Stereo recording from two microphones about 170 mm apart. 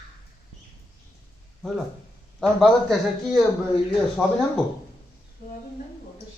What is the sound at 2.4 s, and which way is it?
Speech, centre (ahead or behind).